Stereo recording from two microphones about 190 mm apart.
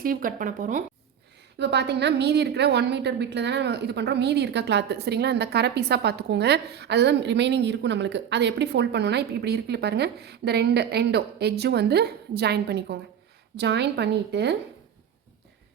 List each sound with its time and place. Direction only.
0.0 s speech: 50° right (ahead or behind)
1.5 s a woman's voice: 60° right (ahead or behind)